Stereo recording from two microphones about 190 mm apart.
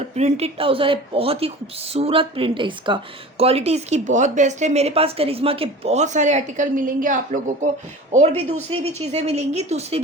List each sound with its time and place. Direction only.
0.2 s speech: 35° right (ahead or behind)